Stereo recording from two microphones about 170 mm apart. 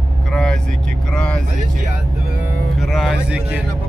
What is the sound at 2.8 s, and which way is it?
Speech, centre (ahead or behind).